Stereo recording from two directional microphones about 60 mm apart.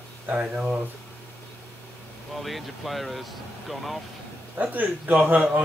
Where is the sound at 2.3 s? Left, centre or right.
Centre.